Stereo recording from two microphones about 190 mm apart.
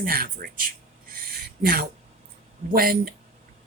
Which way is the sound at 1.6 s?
55° right (ahead or behind).